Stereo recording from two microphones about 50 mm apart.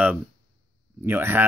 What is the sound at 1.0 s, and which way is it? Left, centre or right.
Speech, right.